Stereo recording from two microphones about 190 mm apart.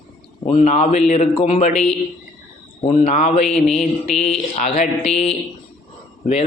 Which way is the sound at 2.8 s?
35° left (ahead or behind).